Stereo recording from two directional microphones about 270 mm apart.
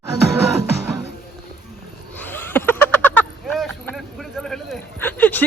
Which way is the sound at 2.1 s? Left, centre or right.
Centre.